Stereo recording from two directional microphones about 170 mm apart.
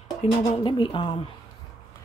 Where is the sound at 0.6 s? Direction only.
30° left (ahead or behind).